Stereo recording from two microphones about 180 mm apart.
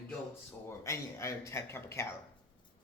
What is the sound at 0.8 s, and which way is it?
Speech, 15° left (ahead or behind).